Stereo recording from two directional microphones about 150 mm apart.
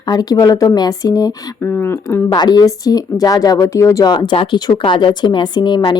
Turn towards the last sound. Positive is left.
turn(degrees=30)  # may be behind; listen again after turning